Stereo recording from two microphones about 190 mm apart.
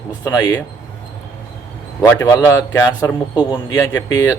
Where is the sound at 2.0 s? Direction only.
15° left (ahead or behind).